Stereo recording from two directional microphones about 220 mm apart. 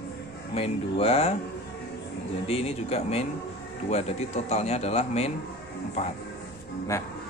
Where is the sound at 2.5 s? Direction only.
25° left (ahead or behind).